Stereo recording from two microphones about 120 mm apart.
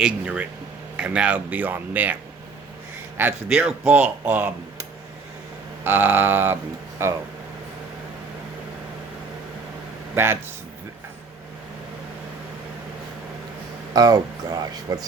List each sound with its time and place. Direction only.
0.0 s a man's voice: 10° right (ahead or behind)
3.2 s a man's voice: 15° right (ahead or behind)
5.8 s a man's voice: 15° right (ahead or behind)
10.2 s speech: 20° right (ahead or behind)
13.9 s speech: 30° right (ahead or behind)